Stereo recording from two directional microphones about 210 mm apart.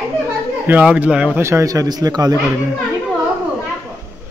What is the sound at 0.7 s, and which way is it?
A man's voice, 5° right (ahead or behind).